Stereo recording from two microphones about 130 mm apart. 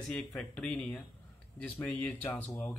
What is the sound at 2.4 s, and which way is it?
Speech, 5° left (ahead or behind).